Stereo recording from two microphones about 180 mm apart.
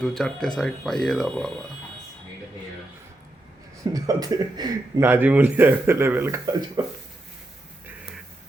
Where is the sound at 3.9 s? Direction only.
20° right (ahead or behind).